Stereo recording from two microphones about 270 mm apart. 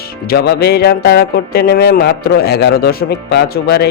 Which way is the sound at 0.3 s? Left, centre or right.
Left.